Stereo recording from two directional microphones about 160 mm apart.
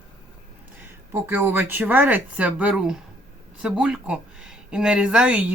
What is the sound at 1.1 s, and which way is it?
Speech, 15° right (ahead or behind).